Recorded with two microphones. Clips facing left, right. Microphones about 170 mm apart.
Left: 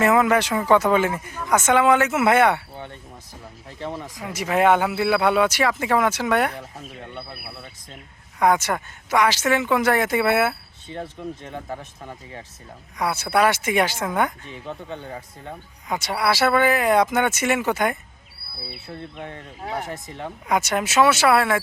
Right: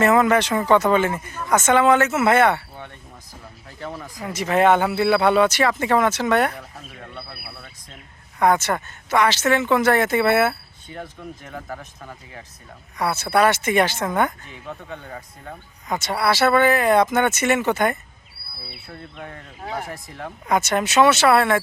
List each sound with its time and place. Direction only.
0.0 s speech: 5° left (ahead or behind)
3.8 s speech: 20° left (ahead or behind)
4.2 s speech: 10° left (ahead or behind)
6.6 s speech: 20° left (ahead or behind)
8.4 s speech: 10° left (ahead or behind)
10.8 s speech: 25° left (ahead or behind)
13.0 s speech: 10° left (ahead or behind)
14.7 s speech: 30° left (ahead or behind)
15.9 s speech: 10° left (ahead or behind)
19.2 s speech: 25° left (ahead or behind)
20.5 s speech: 10° left (ahead or behind)